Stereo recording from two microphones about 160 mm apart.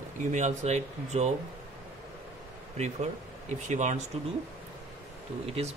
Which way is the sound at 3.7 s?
50° right (ahead or behind).